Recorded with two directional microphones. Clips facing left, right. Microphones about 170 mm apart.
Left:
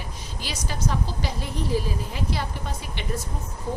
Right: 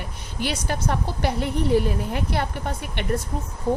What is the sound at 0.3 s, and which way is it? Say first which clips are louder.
A woman's voice: right 7 dB; 60° right (ahead or behind).